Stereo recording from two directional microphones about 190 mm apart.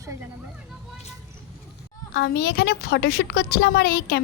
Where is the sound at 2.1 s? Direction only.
60° left (ahead or behind).